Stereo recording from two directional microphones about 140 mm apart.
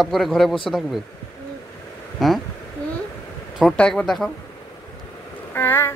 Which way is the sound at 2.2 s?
Centre (ahead or behind).